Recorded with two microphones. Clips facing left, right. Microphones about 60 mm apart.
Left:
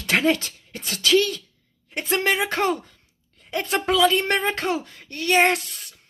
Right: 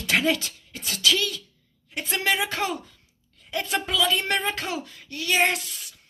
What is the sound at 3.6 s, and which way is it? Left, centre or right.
Speech, left.